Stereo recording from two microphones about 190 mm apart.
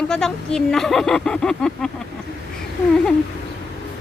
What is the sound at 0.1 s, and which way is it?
Speech, 5° left (ahead or behind).